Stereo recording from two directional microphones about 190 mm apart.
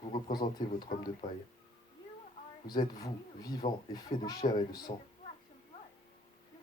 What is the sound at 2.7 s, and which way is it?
Speech, 20° left (ahead or behind).